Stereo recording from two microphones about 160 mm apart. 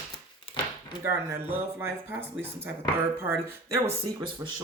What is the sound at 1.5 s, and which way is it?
Speech, 15° right (ahead or behind).